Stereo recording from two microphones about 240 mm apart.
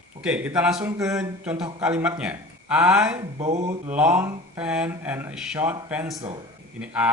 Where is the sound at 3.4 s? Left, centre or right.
Right.